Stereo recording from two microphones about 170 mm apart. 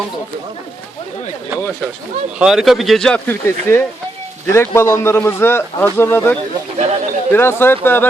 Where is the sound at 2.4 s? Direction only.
Centre (ahead or behind).